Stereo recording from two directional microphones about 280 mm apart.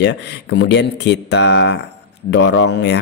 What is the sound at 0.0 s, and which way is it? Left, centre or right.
Speech, left.